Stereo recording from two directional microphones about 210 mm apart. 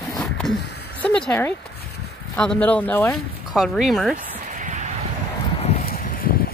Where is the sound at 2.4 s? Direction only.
5° left (ahead or behind).